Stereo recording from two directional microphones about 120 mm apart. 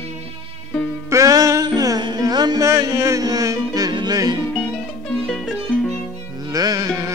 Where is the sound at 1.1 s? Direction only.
30° right (ahead or behind).